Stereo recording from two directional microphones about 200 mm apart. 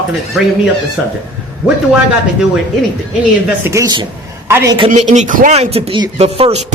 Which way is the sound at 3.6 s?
15° right (ahead or behind).